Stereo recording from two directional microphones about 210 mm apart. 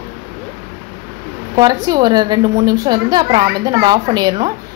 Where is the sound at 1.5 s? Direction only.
20° right (ahead or behind).